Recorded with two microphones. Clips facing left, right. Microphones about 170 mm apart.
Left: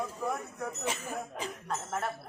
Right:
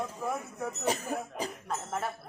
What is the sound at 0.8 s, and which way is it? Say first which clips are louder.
Speech: right 7 dB; 40° right (ahead or behind).